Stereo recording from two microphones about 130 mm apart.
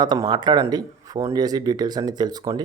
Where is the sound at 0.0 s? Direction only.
35° right (ahead or behind).